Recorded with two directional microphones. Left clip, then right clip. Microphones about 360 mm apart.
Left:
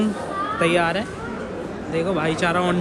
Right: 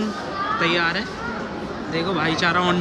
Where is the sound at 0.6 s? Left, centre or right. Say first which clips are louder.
Left 3 dB; centre.